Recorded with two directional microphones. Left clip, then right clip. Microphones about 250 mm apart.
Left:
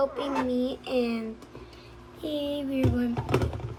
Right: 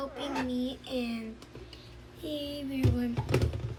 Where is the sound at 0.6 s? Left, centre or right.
Centre.